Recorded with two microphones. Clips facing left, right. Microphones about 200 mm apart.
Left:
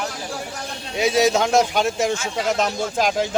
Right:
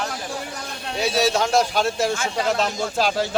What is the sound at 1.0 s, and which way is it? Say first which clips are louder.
Speech: left 3 dB; 15° left (ahead or behind).